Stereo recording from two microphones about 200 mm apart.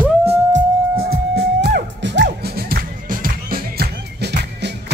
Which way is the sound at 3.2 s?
50° right (ahead or behind).